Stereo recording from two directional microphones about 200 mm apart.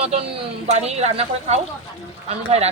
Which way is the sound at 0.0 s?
30° right (ahead or behind).